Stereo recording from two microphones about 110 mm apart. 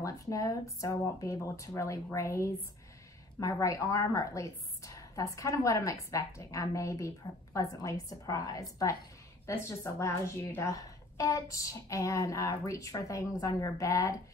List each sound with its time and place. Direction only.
0.0 s a woman's voice: 30° left (ahead or behind)